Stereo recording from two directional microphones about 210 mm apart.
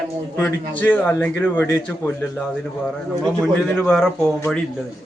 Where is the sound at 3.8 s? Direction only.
5° left (ahead or behind).